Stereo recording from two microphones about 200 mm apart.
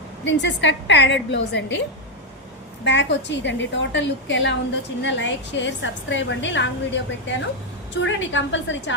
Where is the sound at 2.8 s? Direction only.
65° left (ahead or behind).